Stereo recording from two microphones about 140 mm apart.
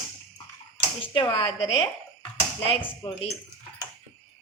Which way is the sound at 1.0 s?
35° left (ahead or behind).